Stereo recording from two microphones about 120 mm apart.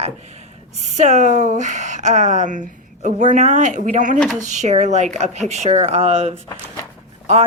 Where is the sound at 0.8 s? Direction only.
80° right.